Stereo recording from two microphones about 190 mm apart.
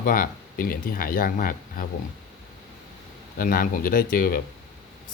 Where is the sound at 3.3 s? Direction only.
50° left (ahead or behind).